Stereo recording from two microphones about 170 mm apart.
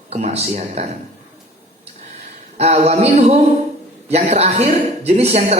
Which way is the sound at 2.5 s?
40° right (ahead or behind).